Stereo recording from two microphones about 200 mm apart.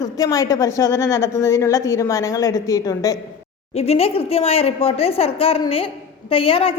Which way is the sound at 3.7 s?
30° left (ahead or behind).